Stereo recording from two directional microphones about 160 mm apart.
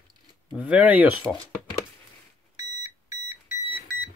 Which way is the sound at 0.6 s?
10° right (ahead or behind).